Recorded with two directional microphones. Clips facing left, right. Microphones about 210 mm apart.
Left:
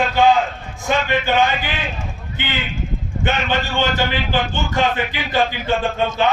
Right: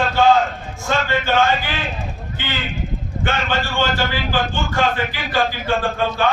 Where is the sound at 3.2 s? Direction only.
20° left (ahead or behind).